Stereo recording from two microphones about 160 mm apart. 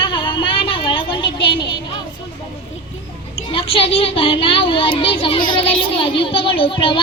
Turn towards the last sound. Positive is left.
turn(degrees=35)  # may be behind; listen again after turning